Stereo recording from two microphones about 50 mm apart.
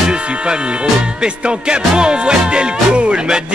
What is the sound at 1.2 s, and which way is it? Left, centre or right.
Music, centre.